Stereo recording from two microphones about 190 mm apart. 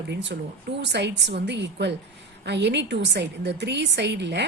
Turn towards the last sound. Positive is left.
turn(degrees=-65)  # may be behind; listen again after turning